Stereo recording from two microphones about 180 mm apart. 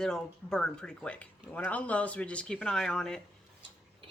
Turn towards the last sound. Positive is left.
turn(degrees=5)  # may be behind; listen again after turning